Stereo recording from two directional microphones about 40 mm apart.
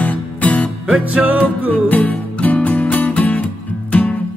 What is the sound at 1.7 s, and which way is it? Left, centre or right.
Music, left.